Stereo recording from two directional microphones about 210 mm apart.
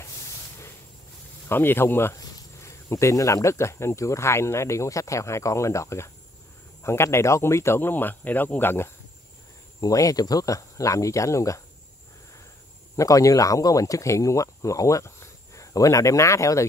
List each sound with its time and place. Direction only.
1.5 s speech: 10° left (ahead or behind)
12.9 s speech: 15° left (ahead or behind)